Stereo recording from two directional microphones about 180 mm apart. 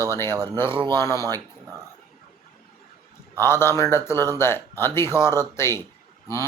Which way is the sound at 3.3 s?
15° left (ahead or behind).